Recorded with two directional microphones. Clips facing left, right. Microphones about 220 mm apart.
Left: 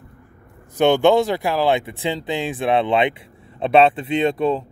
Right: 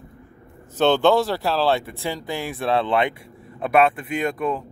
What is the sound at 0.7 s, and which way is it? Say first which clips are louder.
Speech: left 2 dB; 15° left (ahead or behind).